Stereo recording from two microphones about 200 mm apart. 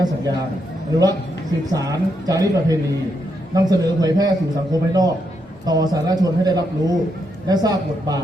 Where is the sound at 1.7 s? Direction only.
15° right (ahead or behind).